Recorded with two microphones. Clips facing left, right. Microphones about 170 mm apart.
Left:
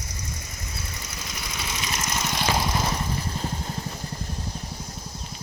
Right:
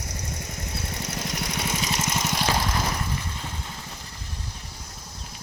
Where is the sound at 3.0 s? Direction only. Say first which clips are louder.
Left 3 dB; 35° left (ahead or behind).